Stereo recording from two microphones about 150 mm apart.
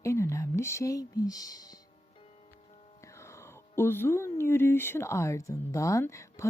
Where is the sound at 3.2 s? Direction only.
15° left (ahead or behind).